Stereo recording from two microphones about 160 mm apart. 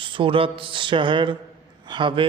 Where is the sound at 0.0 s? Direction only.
30° right (ahead or behind).